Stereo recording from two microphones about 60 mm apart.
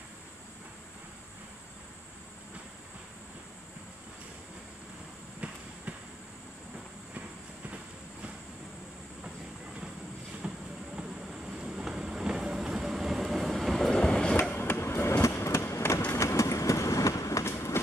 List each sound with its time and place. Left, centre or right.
5.4 s train: centre
10.4 s vehicle: centre
11.0 s train: centre
14.5 s skateboard: left
15.4 s a sound: left
16.1 s train: left